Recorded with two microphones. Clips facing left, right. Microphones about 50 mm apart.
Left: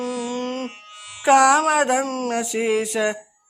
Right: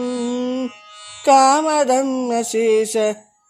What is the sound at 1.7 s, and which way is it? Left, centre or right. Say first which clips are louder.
Speech: right 3 dB; left.